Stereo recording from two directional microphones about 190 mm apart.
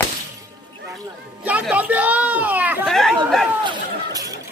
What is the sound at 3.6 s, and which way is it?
Speech, 20° right (ahead or behind).